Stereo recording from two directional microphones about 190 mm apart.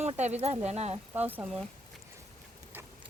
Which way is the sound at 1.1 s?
10° right (ahead or behind).